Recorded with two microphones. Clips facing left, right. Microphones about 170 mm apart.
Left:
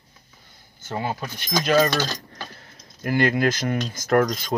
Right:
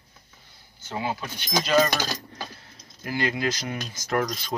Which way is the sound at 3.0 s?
55° left (ahead or behind).